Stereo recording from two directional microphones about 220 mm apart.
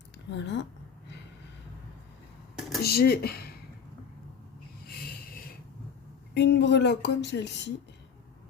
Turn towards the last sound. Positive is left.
turn(degrees=50)  # may be behind; listen again after turning